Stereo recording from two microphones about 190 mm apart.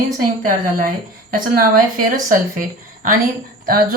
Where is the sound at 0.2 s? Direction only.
45° right (ahead or behind).